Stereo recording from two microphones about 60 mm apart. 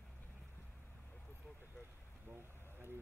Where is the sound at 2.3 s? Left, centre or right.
Right.